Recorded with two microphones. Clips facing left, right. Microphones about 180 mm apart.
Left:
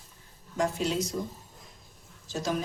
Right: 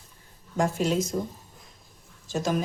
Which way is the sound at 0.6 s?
50° right (ahead or behind).